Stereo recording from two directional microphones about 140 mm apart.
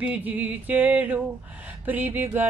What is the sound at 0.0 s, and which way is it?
Speech, 10° right (ahead or behind).